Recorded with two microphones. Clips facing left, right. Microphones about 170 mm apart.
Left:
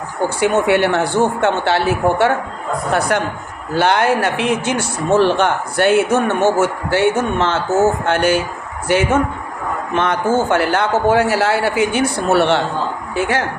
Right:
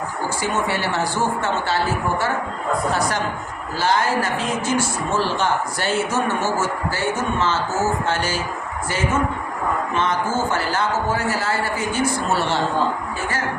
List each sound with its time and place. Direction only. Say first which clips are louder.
0.3 s a man's voice: left 10 dB; 60° left (ahead or behind)
2.9 s a man's voice: left 5 dB; 60° left (ahead or behind)
13.1 s a man's voice: left 8 dB; 75° left (ahead or behind)